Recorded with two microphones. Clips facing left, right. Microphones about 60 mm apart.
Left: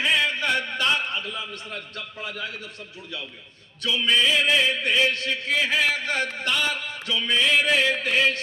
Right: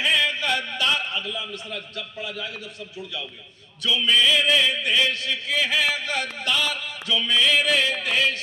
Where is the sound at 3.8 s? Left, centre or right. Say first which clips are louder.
Right 1 dB; left.